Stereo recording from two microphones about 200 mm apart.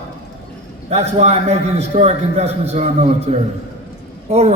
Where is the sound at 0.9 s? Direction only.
35° right (ahead or behind).